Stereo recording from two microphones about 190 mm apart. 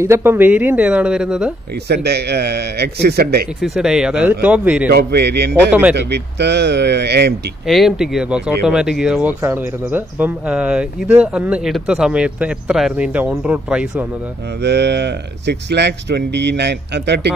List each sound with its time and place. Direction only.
0.0 s speech: 15° right (ahead or behind)
1.9 s speech: 60° right (ahead or behind)
3.6 s speech: 5° right (ahead or behind)
4.9 s speech: 60° right (ahead or behind)
5.7 s speech: 10° right (ahead or behind)
5.9 s speech: 60° right (ahead or behind)
7.6 s speech: centre (ahead or behind)
14.6 s speech: 65° right (ahead or behind)